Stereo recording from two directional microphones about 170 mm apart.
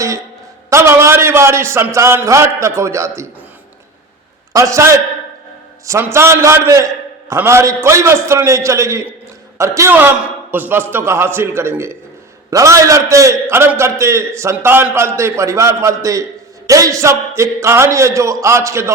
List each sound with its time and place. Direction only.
0.7 s a man's voice: 15° right (ahead or behind)
4.5 s a man's voice: 20° right (ahead or behind)